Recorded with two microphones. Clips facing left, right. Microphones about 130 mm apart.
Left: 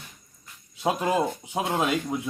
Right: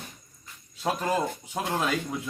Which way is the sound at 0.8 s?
15° left (ahead or behind).